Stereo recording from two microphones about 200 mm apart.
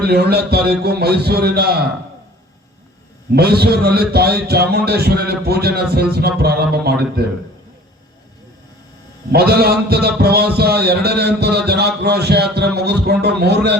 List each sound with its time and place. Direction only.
0.0 s a man's voice: 55° right (ahead or behind)
3.3 s a man's voice: 50° right (ahead or behind)
9.3 s a man's voice: 50° right (ahead or behind)